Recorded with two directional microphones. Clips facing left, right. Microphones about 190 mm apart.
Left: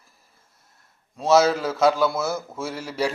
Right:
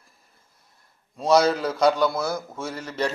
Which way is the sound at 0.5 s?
Centre (ahead or behind).